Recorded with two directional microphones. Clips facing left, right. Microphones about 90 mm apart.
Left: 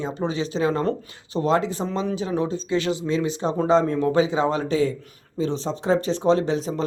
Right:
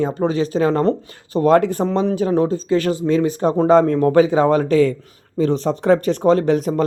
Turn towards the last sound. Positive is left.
turn(degrees=-55)  # may be behind; listen again after turning